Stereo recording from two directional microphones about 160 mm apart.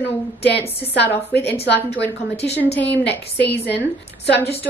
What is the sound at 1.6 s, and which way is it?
Speech, 90° left.